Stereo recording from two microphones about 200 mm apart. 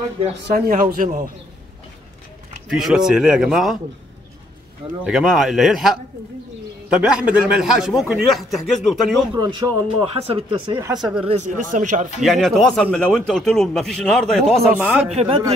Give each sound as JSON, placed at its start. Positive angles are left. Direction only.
{"t": 0.7, "sound": "speech", "side_deg": -40}
{"t": 2.7, "sound": "speech", "side_deg": 0}
{"t": 5.0, "sound": "speech", "side_deg": 0}
{"t": 9.3, "sound": "speech", "side_deg": -20}
{"t": 11.0, "sound": "speech", "side_deg": -5}
{"t": 11.2, "sound": "speech", "side_deg": -35}
{"t": 12.2, "sound": "speech", "side_deg": 0}
{"t": 15.0, "sound": "speech", "side_deg": -30}